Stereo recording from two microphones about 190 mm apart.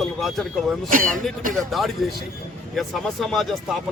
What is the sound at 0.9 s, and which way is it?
Speech, 45° right (ahead or behind).